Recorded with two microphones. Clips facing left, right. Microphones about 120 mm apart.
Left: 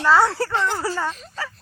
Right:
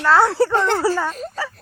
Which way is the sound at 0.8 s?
15° right (ahead or behind).